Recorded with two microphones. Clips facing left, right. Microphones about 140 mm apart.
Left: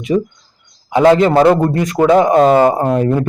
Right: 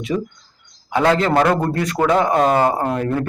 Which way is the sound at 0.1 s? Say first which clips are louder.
Left 8 dB; 20° left (ahead or behind).